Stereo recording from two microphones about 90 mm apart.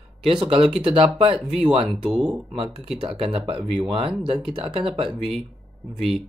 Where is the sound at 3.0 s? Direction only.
90° right.